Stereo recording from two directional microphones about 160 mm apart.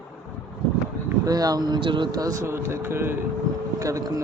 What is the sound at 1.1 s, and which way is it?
Speech, 25° right (ahead or behind).